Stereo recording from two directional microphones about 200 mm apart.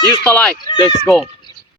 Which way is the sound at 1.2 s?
20° left (ahead or behind).